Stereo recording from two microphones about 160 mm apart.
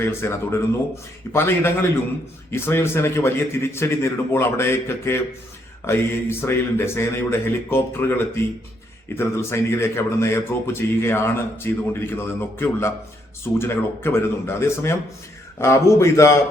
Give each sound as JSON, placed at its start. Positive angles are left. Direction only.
{"t": 0.0, "sound": "speech", "side_deg": 15}